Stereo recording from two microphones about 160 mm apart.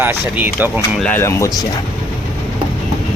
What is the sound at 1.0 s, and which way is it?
Speech, 15° left (ahead or behind).